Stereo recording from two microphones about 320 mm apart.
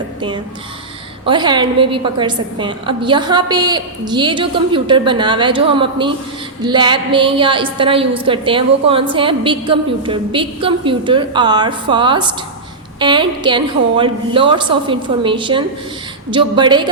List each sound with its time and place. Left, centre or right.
1.3 s a woman's voice: centre